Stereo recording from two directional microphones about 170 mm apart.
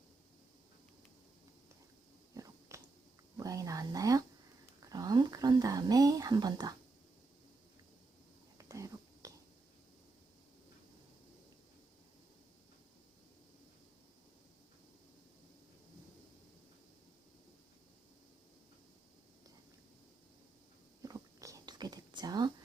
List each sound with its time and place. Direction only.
2.3 s biting: 20° right (ahead or behind)
3.3 s a sound: 20° right (ahead or behind)
4.9 s whispering: 20° right (ahead or behind)
8.5 s whispering: 20° right (ahead or behind)
21.0 s whispering: 20° right (ahead or behind)